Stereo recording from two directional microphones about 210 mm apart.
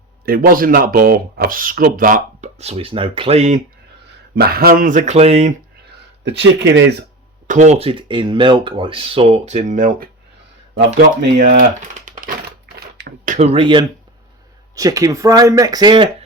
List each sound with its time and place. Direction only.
0.3 s speech: 45° right (ahead or behind)
4.4 s speech: 45° right (ahead or behind); by 5.5 s 30° right (ahead or behind)
6.2 s speech: 55° right (ahead or behind)
7.4 s speech: 35° right (ahead or behind)
11.4 s speech: 40° right (ahead or behind); by 16.0 s 20° right (ahead or behind)